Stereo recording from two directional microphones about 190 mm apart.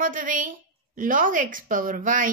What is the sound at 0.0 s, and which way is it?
A woman's voice, 45° right (ahead or behind).